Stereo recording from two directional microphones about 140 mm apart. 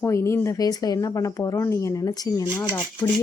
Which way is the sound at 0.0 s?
20° left (ahead or behind).